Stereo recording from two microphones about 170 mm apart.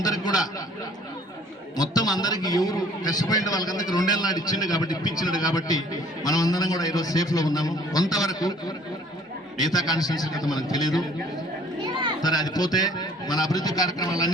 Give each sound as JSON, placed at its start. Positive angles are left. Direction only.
{"t": 0.0, "sound": "a sound", "side_deg": 20}
{"t": 1.7, "sound": "a man's voice", "side_deg": 20}
{"t": 11.9, "sound": "children playing", "side_deg": -25}
{"t": 12.2, "sound": "a man's voice", "side_deg": 20}